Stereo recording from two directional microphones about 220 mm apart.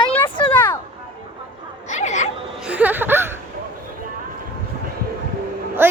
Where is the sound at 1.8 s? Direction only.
35° left (ahead or behind).